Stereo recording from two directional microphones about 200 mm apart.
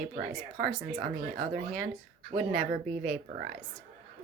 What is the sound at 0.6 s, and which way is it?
A woman's voice, 40° right (ahead or behind).